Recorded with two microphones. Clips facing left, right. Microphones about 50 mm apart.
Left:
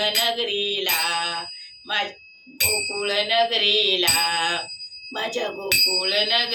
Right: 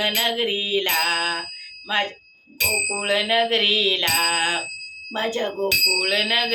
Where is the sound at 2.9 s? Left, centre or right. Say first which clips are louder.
Right 1 dB; right.